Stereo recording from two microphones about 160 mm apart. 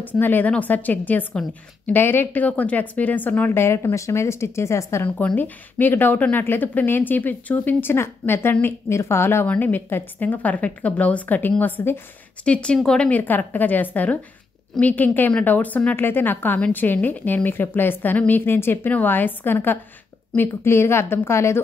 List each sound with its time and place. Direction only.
0.0 s speech: 10° left (ahead or behind)